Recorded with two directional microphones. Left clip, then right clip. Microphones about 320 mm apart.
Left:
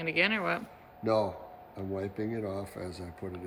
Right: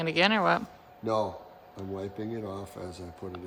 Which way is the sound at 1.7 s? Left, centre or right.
Centre.